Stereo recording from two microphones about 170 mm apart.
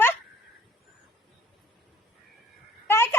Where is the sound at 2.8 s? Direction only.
15° left (ahead or behind).